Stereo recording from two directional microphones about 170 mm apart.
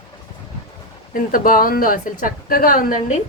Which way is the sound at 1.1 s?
55° left (ahead or behind).